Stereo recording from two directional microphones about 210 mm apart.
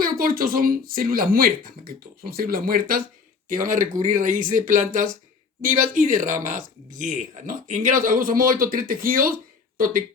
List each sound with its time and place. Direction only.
0.0 s speech: 40° right (ahead or behind)